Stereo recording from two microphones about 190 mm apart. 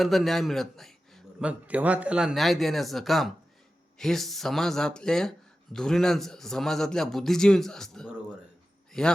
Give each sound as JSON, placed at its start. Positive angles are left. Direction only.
{"t": 0.0, "sound": "a man's voice", "side_deg": 0}